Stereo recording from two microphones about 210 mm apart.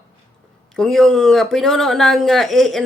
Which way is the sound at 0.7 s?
Centre (ahead or behind).